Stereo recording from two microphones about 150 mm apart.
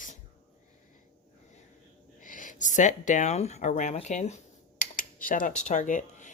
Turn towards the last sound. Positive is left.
turn(degrees=55)  # may be behind; listen again after turning